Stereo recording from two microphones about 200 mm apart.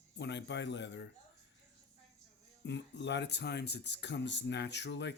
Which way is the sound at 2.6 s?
60° left (ahead or behind).